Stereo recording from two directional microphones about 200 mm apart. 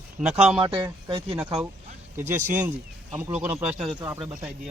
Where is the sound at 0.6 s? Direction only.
25° right (ahead or behind).